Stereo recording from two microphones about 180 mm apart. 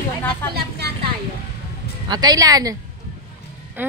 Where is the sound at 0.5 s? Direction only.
65° right (ahead or behind).